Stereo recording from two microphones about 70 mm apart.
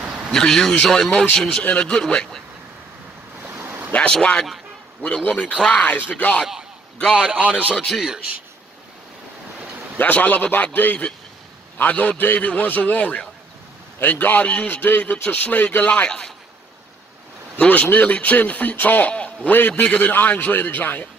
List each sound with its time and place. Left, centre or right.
0.3 s speech: centre
3.6 s a sound: right
4.1 s a man's voice: centre
7.2 s speech: right
7.9 s speech: centre
9.9 s a man's voice: left
17.6 s a man's voice: centre